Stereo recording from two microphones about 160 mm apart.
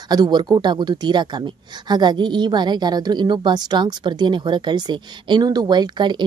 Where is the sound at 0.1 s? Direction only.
25° right (ahead or behind).